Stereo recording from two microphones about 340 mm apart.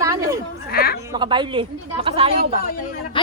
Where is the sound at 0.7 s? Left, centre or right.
Left.